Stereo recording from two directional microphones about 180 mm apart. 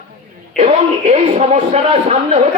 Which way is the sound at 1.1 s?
35° right (ahead or behind).